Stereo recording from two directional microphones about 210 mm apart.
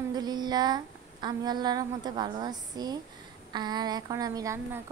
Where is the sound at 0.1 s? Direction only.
20° right (ahead or behind).